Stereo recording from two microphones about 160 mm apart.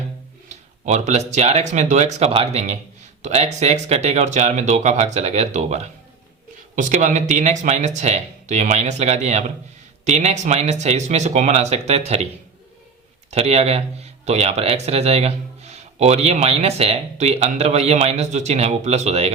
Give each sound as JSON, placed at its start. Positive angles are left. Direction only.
{"t": 0.4, "sound": "speech", "side_deg": -45}
{"t": 13.3, "sound": "speech", "side_deg": -40}